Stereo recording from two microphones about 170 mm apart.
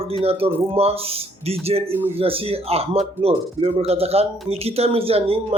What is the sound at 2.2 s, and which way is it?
Speech, 35° right (ahead or behind).